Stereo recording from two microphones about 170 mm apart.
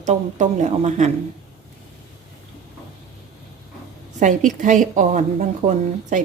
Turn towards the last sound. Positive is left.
turn(degrees=-45)  # may be behind; listen again after turning